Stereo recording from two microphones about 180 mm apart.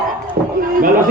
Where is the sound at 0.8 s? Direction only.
45° right (ahead or behind).